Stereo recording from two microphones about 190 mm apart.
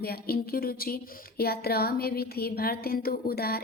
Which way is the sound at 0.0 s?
55° left (ahead or behind).